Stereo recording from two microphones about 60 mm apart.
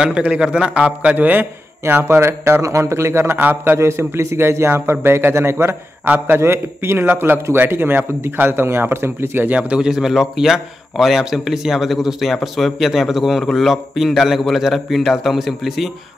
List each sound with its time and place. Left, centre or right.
0.4 s a man's voice: centre
1.1 s a man's voice: right
3.3 s speech: right
3.7 s a man's voice: right
6.0 s speech: right
9.5 s a man's voice: centre